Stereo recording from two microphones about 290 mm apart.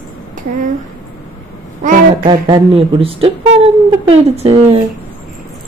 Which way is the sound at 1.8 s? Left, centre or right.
Right.